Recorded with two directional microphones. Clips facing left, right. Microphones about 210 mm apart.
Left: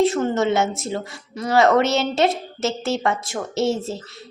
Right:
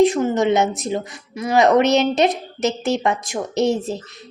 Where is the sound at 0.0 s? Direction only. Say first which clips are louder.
Right 3 dB; 15° right (ahead or behind).